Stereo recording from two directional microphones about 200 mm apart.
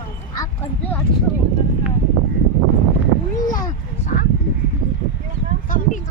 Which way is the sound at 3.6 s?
40° left (ahead or behind).